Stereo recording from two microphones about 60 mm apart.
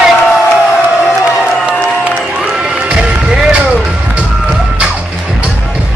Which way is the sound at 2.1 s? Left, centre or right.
Centre.